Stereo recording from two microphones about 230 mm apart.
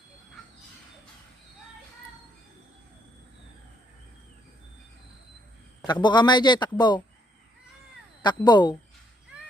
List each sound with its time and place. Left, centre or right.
5.8 s speech: centre
8.2 s speech: centre